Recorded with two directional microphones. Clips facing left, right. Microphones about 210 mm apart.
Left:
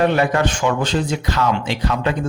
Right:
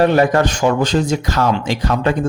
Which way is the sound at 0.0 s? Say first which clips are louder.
Right 4 dB; 40° right (ahead or behind).